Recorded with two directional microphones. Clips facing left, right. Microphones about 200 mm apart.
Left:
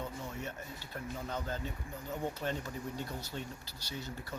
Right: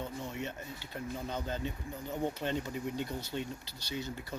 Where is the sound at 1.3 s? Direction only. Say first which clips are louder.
Right 1 dB; 20° right (ahead or behind).